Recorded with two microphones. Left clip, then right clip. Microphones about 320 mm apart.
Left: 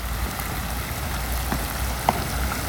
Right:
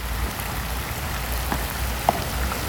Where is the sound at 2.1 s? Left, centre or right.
Right.